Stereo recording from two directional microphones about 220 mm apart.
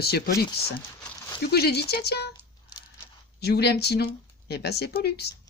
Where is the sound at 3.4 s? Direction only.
45° left (ahead or behind).